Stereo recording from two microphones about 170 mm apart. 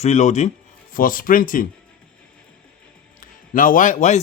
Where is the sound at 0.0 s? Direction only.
40° left (ahead or behind).